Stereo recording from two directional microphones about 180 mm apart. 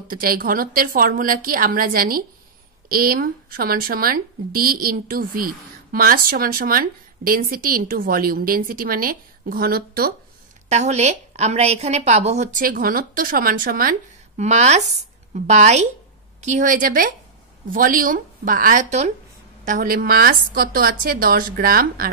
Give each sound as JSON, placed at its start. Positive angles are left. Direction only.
{"t": 0.1, "sound": "speech", "side_deg": -55}
{"t": 10.7, "sound": "a woman's voice", "side_deg": -40}
{"t": 19.6, "sound": "speech", "side_deg": -50}